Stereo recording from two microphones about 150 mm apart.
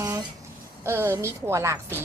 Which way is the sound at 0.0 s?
25° right (ahead or behind).